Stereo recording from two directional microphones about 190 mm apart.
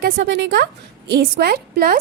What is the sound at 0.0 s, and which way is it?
A woman's voice, 65° right (ahead or behind).